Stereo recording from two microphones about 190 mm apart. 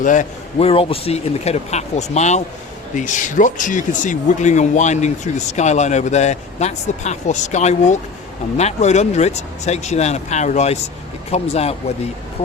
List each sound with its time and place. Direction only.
0.0 s a man's voice: 40° left (ahead or behind)
0.7 s speech: 30° left (ahead or behind)